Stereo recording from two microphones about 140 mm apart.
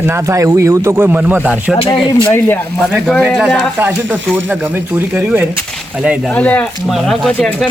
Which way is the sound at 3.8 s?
15° right (ahead or behind).